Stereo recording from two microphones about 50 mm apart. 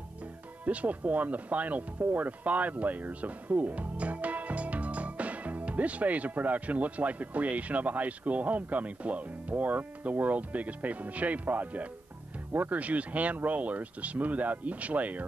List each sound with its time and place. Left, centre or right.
0.7 s speech: right